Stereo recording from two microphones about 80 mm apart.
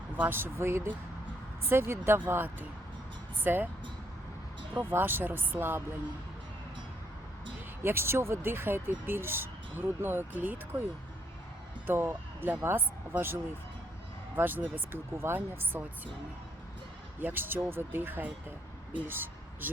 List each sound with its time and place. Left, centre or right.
0.2 s speech: right
4.7 s speech: right
7.8 s speech: right
11.9 s speech: right
17.2 s speech: right